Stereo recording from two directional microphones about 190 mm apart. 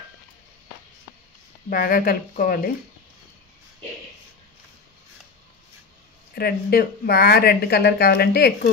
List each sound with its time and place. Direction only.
1.7 s speech: 45° left (ahead or behind)
6.3 s speech: 55° left (ahead or behind)